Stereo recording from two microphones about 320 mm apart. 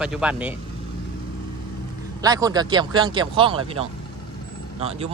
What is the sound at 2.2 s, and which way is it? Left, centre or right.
Speech, centre.